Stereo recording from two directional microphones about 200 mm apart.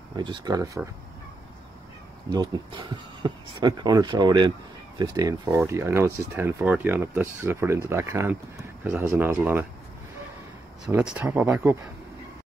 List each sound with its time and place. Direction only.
0.1 s speech: 25° right (ahead or behind)
2.2 s speech: 20° right (ahead or behind)
10.9 s speech: 10° right (ahead or behind)